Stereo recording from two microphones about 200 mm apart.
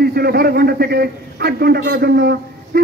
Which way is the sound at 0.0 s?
50° right (ahead or behind).